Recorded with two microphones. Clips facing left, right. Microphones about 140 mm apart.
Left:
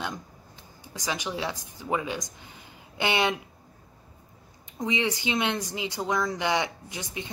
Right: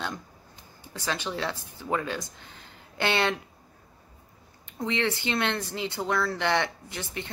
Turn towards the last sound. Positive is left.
turn(degrees=15)  # may be behind; listen again after turning